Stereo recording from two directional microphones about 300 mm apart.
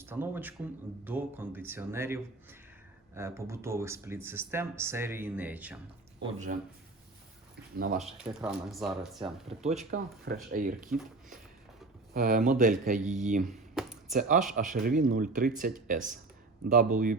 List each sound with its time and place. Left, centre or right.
0.0 s speech: centre
6.1 s speech: right
7.9 s speech: centre
9.6 s speech: right
12.1 s speech: right
13.4 s a sound: centre
14.1 s speech: right